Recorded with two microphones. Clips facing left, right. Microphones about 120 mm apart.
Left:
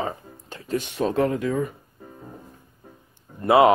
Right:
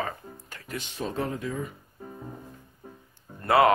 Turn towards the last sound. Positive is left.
turn(degrees=20)  # may be behind; listen again after turning